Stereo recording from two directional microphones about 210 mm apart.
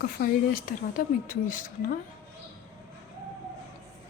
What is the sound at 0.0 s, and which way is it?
Speech, 45° left (ahead or behind).